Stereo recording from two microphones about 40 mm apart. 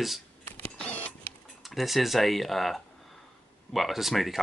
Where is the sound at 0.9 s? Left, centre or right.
Left.